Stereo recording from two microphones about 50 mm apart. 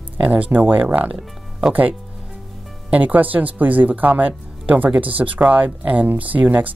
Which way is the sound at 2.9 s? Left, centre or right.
Right.